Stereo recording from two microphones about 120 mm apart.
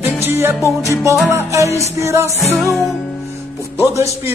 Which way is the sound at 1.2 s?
25° right (ahead or behind).